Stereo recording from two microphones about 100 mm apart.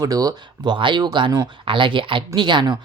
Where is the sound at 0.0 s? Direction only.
40° right (ahead or behind).